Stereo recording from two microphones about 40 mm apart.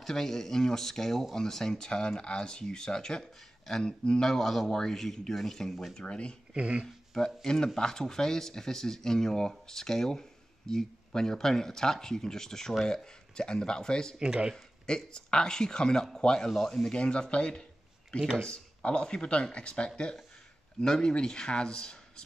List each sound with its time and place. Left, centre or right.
0.0 s speech: centre
4.3 s speech: centre
6.0 s speech: left
6.5 s speech: right
7.2 s speech: centre
14.1 s speech: right
14.9 s speech: centre
16.9 s speech: left